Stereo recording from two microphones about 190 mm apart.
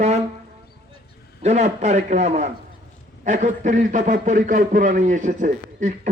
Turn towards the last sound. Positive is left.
turn(degrees=-40)  # may be behind; listen again after turning